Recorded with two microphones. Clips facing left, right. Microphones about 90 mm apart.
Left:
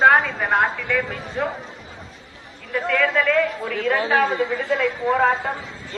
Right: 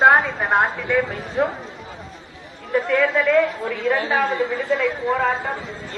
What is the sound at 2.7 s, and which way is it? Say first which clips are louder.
A man's voice: right 2 dB; 35° right (ahead or behind).